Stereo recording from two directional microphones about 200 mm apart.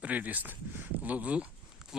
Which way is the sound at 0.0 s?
10° right (ahead or behind).